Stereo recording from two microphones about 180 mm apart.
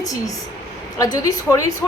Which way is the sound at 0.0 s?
20° left (ahead or behind).